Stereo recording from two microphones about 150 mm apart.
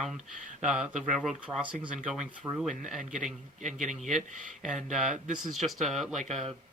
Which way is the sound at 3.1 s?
55° right (ahead or behind).